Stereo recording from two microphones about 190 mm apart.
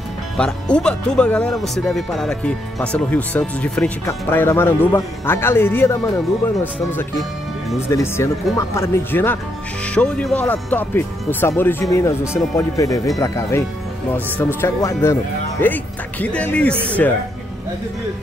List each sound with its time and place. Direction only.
0.4 s speech: 5° left (ahead or behind)